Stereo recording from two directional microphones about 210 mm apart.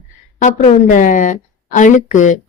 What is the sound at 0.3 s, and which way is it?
A woman's voice, 35° left (ahead or behind).